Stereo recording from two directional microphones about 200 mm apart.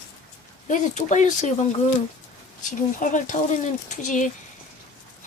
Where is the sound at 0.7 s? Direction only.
40° left (ahead or behind).